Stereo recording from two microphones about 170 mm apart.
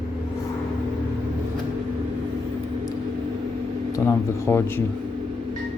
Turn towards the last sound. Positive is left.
turn(degrees=15)  # may be behind; listen again after turning